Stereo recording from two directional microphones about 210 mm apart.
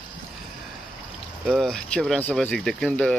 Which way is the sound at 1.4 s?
Centre (ahead or behind).